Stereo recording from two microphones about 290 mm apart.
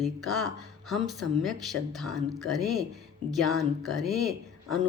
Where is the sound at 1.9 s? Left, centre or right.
Centre.